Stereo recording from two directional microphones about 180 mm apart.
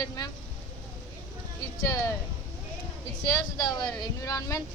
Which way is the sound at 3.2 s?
20° left (ahead or behind).